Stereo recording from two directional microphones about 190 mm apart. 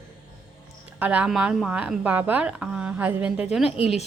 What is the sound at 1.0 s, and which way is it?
A woman's voice, 10° right (ahead or behind).